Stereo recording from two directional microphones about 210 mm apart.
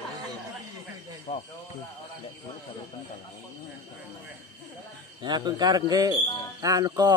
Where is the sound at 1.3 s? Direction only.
40° left (ahead or behind).